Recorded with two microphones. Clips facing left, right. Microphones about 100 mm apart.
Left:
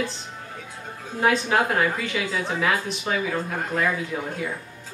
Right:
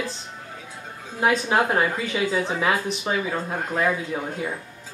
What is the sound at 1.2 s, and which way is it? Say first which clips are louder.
A woman's voice: even; 20° right (ahead or behind).